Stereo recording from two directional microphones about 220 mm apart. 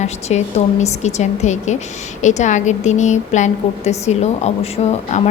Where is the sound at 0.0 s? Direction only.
30° left (ahead or behind).